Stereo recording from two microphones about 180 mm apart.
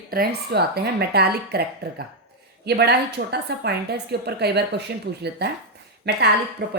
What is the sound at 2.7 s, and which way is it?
A woman's voice, 65° right (ahead or behind).